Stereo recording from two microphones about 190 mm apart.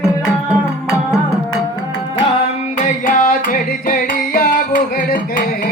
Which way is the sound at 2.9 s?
45° left (ahead or behind).